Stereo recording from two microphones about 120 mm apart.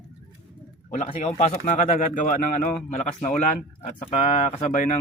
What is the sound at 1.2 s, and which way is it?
Speech, 65° left (ahead or behind).